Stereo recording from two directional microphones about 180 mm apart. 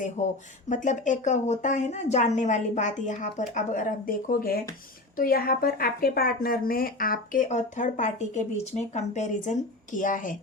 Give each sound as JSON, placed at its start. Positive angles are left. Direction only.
{"t": 0.2, "sound": "speech", "side_deg": 40}